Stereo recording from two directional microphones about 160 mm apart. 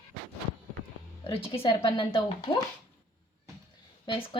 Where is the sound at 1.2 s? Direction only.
35° left (ahead or behind).